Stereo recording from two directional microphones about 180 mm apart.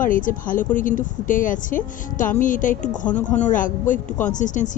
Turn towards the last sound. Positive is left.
turn(degrees=45)  # may be behind; listen again after turning